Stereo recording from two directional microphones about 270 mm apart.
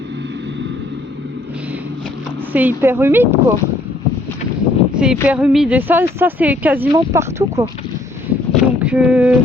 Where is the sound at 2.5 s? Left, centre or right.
Centre.